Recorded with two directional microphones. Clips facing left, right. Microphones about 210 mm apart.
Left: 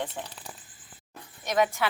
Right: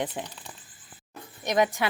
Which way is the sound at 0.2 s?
15° right (ahead or behind).